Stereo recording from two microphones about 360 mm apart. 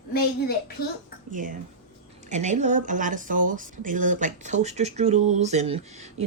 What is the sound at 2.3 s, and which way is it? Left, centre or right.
Speech, centre.